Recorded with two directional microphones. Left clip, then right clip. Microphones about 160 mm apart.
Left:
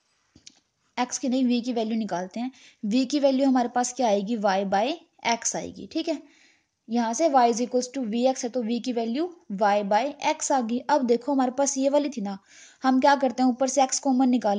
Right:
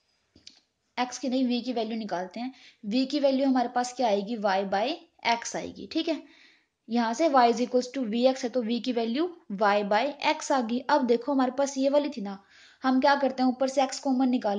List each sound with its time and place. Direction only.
0.5 s a woman's voice: 45° left (ahead or behind)